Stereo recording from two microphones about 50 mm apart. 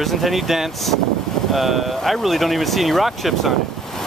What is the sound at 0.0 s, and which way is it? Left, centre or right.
Speech, centre.